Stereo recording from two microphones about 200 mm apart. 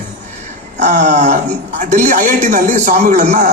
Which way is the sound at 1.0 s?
35° right (ahead or behind).